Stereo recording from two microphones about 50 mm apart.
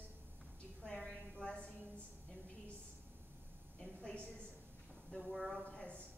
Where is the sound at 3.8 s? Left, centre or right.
Centre.